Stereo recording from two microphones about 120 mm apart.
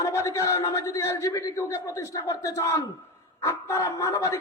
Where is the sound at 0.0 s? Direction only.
25° left (ahead or behind).